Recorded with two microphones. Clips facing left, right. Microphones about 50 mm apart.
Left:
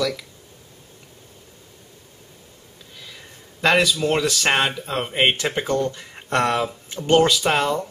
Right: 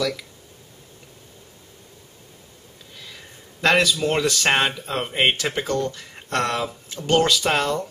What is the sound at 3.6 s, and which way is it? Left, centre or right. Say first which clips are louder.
Speech: left 1 dB; centre.